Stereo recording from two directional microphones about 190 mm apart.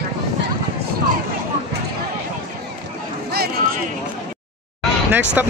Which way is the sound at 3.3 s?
55° right (ahead or behind).